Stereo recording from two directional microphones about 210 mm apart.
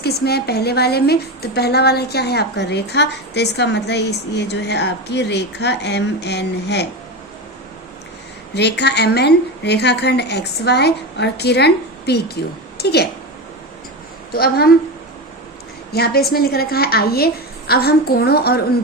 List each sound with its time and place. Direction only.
0.0 s a woman's voice: 50° left (ahead or behind)
8.5 s a woman's voice: 50° left (ahead or behind)
14.3 s a woman's voice: 45° left (ahead or behind)
15.9 s a woman's voice: 50° left (ahead or behind)